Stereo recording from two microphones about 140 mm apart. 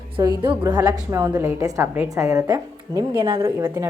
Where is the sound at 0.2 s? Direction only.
25° right (ahead or behind).